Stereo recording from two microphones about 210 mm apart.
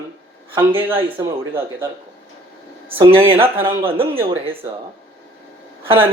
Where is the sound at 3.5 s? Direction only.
25° right (ahead or behind).